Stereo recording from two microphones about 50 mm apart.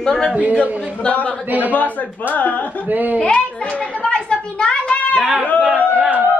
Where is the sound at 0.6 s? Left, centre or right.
Left.